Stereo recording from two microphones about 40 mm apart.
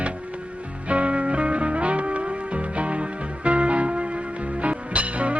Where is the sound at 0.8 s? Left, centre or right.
Right.